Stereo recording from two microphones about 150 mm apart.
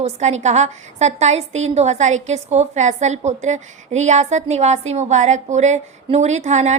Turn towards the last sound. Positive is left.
turn(degrees=-50)  # may be behind; listen again after turning